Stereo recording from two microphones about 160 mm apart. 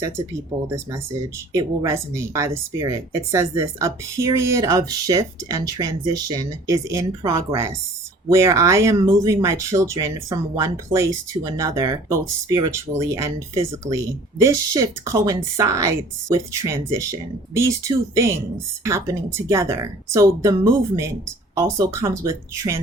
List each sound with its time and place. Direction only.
0.7 s speech: 20° right (ahead or behind)